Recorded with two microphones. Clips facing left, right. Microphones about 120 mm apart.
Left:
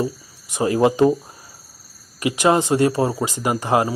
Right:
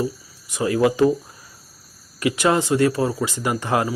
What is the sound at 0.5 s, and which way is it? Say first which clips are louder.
Speech: left 2 dB; 30° left (ahead or behind).